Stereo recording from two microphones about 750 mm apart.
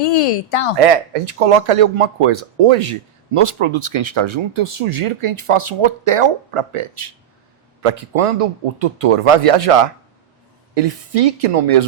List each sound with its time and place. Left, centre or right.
0.0 s speech: left
0.8 s speech: right